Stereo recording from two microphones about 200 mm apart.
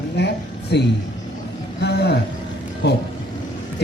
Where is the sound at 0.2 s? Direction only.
55° left (ahead or behind).